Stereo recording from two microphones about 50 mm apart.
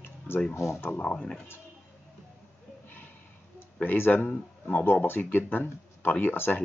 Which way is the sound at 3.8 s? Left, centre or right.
Left.